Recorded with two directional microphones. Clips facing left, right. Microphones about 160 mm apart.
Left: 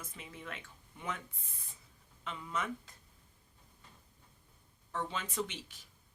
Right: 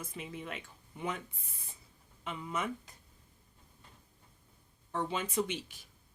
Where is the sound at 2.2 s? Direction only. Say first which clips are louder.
Right 2 dB; 15° right (ahead or behind).